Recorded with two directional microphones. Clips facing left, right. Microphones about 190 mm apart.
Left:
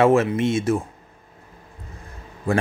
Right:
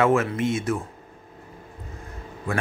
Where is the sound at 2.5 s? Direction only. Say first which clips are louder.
Left 6 dB; 30° left (ahead or behind).